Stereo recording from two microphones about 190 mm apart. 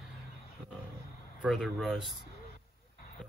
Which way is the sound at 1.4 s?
Centre (ahead or behind).